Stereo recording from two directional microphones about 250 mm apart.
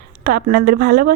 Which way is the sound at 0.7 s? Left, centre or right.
Right.